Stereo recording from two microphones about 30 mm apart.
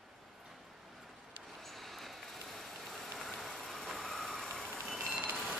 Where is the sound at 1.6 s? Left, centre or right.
Centre.